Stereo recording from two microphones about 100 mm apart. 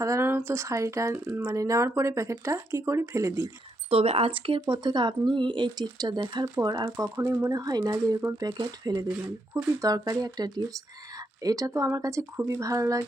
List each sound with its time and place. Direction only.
0.0 s speech: 30° right (ahead or behind)
3.8 s speech: 85° right; by 4.6 s 60° right (ahead or behind)
4.7 s speech: 50° right (ahead or behind); by 13.0 s 30° right (ahead or behind)